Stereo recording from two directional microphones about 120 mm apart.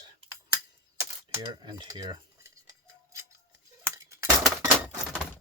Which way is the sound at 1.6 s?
35° right (ahead or behind).